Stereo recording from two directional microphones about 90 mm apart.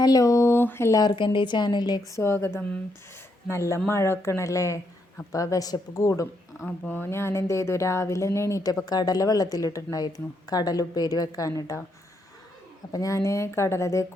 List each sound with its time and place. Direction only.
0.0 s a woman's voice: 40° left (ahead or behind); by 0.9 s 25° left (ahead or behind)
1.1 s a woman's voice: 65° left (ahead or behind)
2.1 s a woman's voice: 30° left (ahead or behind)
6.7 s a woman's voice: 20° left (ahead or behind); by 11.8 s 40° left (ahead or behind)
12.9 s a woman's voice: 40° left (ahead or behind)